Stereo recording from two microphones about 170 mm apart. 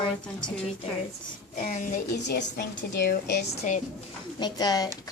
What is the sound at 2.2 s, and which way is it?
Speech, 90° left.